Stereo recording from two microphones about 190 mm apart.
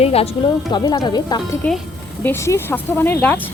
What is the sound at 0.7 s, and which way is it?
Speech, 20° left (ahead or behind).